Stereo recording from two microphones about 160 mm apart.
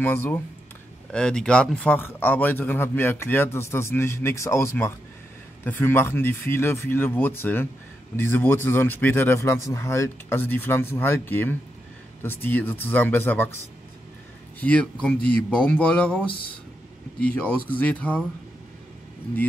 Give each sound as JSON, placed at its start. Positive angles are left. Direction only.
{"t": 0.0, "sound": "speech", "side_deg": 10}
{"t": 14.6, "sound": "speech", "side_deg": 10}
{"t": 16.3, "sound": "speech", "side_deg": 30}
{"t": 17.5, "sound": "speech", "side_deg": 10}